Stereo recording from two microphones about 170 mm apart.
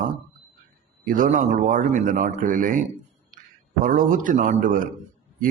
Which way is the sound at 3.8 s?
50° right (ahead or behind).